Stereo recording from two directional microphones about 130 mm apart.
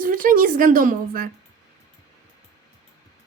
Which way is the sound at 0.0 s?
90° right.